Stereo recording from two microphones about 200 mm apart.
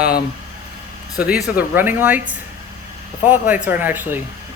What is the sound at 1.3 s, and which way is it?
Speech, 5° right (ahead or behind).